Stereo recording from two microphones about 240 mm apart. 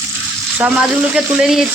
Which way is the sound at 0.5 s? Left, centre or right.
Centre.